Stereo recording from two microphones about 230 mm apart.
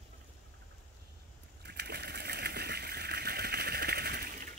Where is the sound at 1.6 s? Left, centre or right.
Right.